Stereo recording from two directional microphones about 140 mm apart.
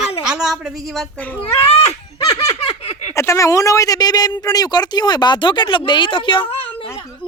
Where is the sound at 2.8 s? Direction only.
50° left (ahead or behind).